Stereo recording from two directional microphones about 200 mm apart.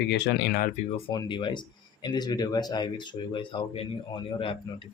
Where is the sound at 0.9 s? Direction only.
20° left (ahead or behind).